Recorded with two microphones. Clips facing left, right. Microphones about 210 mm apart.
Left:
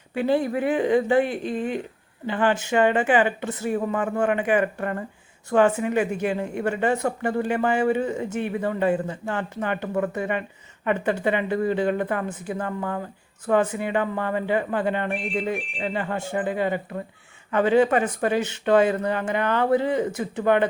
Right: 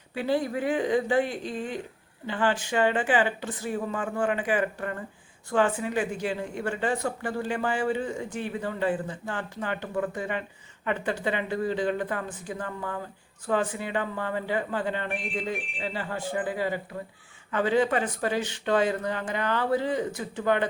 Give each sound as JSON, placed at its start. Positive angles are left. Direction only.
{"t": 0.2, "sound": "speech", "side_deg": 55}
{"t": 9.6, "sound": "speech", "side_deg": 50}
{"t": 16.1, "sound": "speech", "side_deg": 25}
{"t": 16.4, "sound": "speech", "side_deg": 60}